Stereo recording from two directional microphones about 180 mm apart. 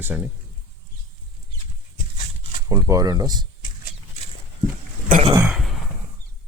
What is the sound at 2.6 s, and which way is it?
Speech, 20° right (ahead or behind).